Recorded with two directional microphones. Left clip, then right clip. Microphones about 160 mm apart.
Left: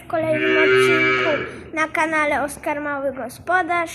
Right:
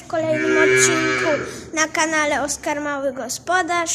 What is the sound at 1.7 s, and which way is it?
A woman's voice, 15° right (ahead or behind).